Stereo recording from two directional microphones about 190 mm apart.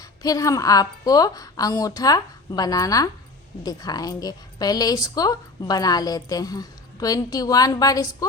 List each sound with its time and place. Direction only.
0.0 s a woman's voice: 20° left (ahead or behind)